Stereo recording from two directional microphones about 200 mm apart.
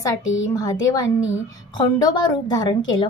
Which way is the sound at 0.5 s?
20° left (ahead or behind).